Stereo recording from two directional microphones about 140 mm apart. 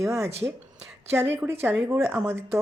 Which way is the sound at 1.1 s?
15° right (ahead or behind).